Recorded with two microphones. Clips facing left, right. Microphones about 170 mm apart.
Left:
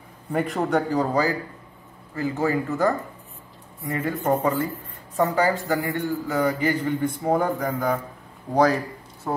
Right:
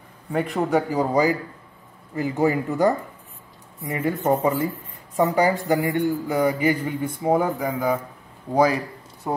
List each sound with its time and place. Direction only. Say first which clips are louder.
0.3 s a man's voice: right 1 dB; centre (ahead or behind)